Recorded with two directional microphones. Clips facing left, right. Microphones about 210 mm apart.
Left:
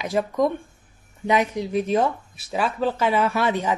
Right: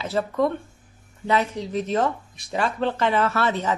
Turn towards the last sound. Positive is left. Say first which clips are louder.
# left 1 dB
turn(degrees=10)  # may be behind; listen again after turning